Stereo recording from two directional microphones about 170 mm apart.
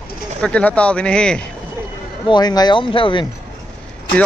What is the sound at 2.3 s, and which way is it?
Speech, 25° left (ahead or behind).